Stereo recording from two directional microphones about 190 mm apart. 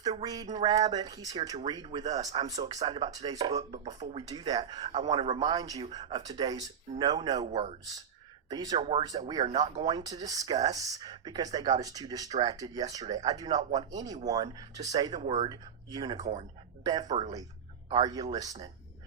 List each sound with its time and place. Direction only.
0.0 s speech: 20° right (ahead or behind)
3.6 s speech: 35° right (ahead or behind)
4.3 s speech: 20° right (ahead or behind)
8.8 s speech: 30° right (ahead or behind)
9.0 s speech: 20° right (ahead or behind)